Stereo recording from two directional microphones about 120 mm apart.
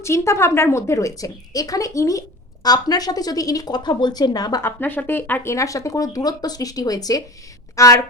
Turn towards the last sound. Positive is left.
turn(degrees=25)  # may be behind; listen again after turning